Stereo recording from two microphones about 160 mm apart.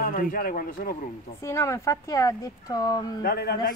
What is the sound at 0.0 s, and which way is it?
Speech, 65° left (ahead or behind).